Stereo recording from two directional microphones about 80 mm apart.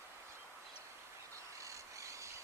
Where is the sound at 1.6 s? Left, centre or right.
Right.